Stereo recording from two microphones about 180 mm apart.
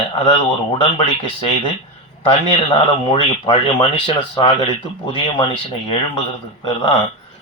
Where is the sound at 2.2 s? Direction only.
30° left (ahead or behind).